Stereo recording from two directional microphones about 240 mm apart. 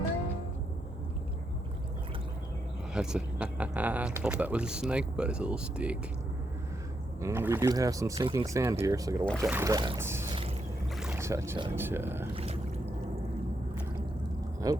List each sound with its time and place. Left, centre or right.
2.9 s speech: centre
7.2 s speech: centre
12.3 s boat: right
14.6 s speech: centre